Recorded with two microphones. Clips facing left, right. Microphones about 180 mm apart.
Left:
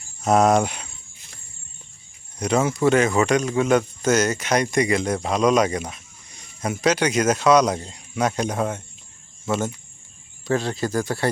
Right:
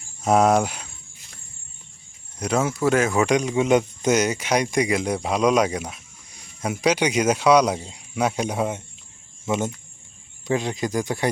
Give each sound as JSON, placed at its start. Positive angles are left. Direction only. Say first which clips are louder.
{"t": 0.2, "sound": "speech", "louder": "left 1 dB", "side_deg": -10}
{"t": 2.4, "sound": "speech", "louder": "left 2 dB", "side_deg": -5}